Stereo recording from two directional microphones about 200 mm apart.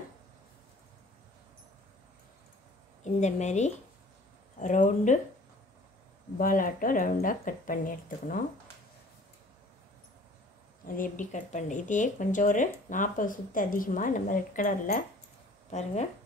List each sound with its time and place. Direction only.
3.0 s a woman's voice: 35° left (ahead or behind)
6.3 s a woman's voice: 45° left (ahead or behind)
11.0 s speech: 40° left (ahead or behind)